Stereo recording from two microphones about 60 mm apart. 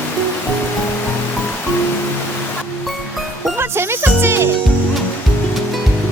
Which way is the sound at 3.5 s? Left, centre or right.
Right.